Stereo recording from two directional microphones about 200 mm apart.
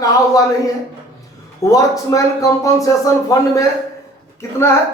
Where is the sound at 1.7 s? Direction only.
15° left (ahead or behind).